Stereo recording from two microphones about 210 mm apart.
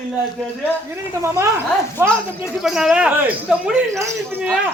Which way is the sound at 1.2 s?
15° right (ahead or behind).